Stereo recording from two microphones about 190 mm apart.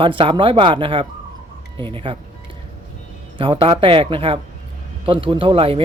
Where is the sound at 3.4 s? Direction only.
25° right (ahead or behind).